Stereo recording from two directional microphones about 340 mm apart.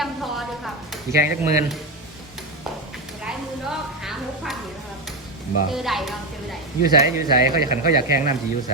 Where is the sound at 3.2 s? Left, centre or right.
Centre.